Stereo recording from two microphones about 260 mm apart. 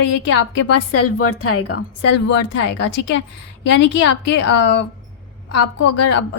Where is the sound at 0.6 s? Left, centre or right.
Left.